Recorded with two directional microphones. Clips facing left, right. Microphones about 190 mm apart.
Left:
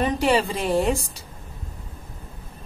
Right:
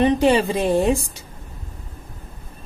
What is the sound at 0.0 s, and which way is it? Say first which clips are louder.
Speech: right 5 dB; 20° right (ahead or behind).